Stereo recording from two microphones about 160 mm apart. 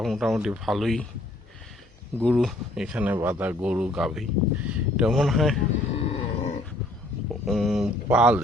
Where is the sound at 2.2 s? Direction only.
Centre (ahead or behind).